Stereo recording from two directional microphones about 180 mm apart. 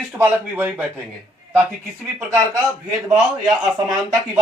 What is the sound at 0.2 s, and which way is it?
Speech, 10° right (ahead or behind).